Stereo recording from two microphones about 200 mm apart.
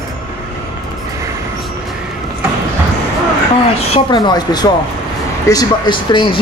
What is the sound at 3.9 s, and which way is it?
A man's voice, 20° left (ahead or behind).